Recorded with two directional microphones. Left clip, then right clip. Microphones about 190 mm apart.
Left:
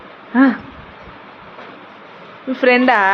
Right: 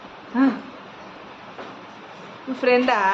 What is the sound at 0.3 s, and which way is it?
Speech, 35° left (ahead or behind).